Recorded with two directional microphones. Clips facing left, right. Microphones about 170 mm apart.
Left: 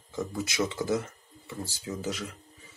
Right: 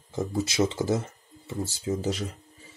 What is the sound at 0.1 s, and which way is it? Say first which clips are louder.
Speech: right 4 dB; 25° right (ahead or behind).